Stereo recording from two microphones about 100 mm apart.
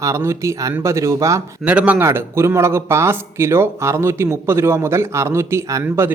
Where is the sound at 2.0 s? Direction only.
25° right (ahead or behind).